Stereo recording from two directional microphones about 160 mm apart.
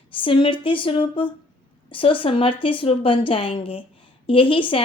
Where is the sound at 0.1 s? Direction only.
35° left (ahead or behind).